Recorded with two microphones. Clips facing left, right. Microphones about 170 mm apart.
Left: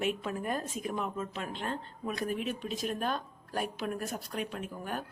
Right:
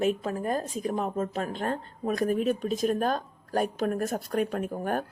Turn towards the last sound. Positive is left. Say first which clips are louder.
# right 8 dB
turn(degrees=-50)  # may be behind; listen again after turning